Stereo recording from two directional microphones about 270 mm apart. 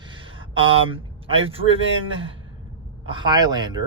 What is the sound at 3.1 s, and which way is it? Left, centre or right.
Speech, centre.